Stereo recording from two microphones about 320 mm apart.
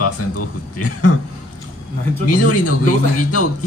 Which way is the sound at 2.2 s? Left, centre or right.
Left.